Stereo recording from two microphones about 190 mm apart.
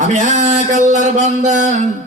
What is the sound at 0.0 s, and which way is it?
A man's voice, 40° right (ahead or behind).